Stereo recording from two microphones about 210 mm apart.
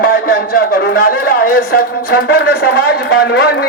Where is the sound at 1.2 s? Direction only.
45° left (ahead or behind).